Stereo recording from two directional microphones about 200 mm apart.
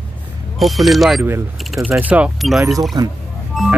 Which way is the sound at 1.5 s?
Centre (ahead or behind).